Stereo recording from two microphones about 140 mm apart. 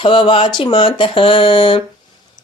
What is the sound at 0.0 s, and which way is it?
Speech, 35° left (ahead or behind).